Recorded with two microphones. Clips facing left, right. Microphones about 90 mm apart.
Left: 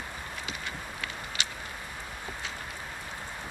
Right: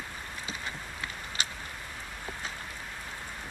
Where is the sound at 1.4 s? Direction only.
35° right (ahead or behind).